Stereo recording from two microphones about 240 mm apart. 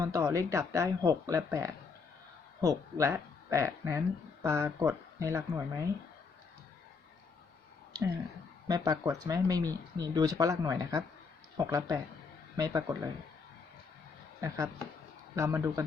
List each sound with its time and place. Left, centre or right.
0.0 s speech: centre
8.6 s speech: centre
14.4 s speech: centre